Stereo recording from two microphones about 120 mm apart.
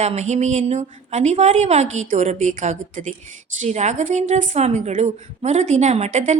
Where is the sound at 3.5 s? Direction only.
70° right (ahead or behind).